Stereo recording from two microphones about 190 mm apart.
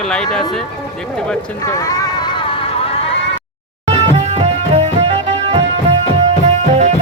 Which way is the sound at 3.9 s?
35° right (ahead or behind).